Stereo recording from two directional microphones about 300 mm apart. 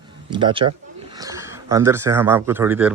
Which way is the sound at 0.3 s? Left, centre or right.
Centre.